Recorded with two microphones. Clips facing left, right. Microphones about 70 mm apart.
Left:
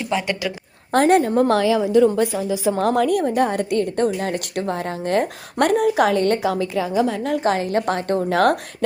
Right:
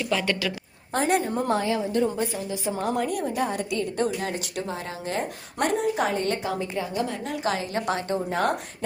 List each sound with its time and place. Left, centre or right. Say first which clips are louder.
0.0 s speech: left 3 dB; left
1.0 s a woman's voice: left 8 dB; left
1.4 s a woman's voice: left 8 dB; left
6.4 s a woman's voice: left 7 dB; left
7.3 s a woman's voice: left 8 dB; left
8.3 s a woman's voice: left 8 dB; left